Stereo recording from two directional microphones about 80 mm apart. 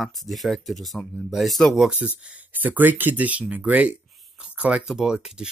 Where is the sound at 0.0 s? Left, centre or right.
Centre.